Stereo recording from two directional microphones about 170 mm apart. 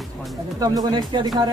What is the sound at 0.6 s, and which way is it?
Speech, 20° right (ahead or behind).